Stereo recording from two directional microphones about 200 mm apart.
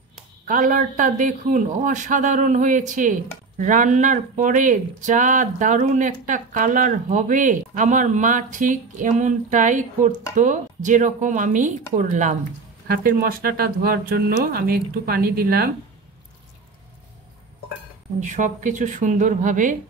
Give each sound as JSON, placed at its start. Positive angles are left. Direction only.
{"t": 0.5, "sound": "a man's voice", "side_deg": -40}
{"t": 18.2, "sound": "a man's voice", "side_deg": -40}